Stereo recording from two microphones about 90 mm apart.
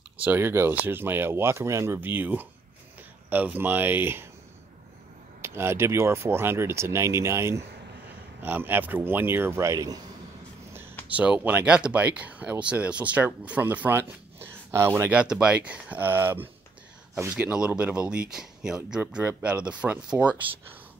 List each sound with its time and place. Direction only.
0.2 s speech: 25° right (ahead or behind)
5.4 s speech: 30° right (ahead or behind)
9.7 s speech: 45° right (ahead or behind)
11.1 s speech: 15° right (ahead or behind); by 15.0 s 30° right (ahead or behind)
15.0 s speech: 10° right (ahead or behind)